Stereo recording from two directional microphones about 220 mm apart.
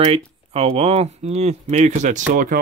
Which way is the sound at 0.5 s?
25° right (ahead or behind).